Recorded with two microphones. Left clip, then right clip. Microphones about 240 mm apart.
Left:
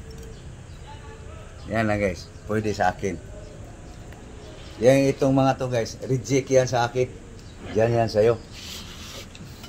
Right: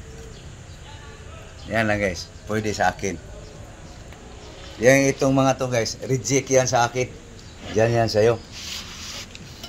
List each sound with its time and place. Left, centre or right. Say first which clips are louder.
1.7 s speech: right 2 dB; centre
4.8 s speech: right 1 dB; right